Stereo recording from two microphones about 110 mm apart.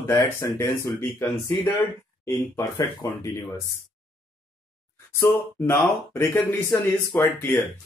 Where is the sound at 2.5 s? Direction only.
25° left (ahead or behind).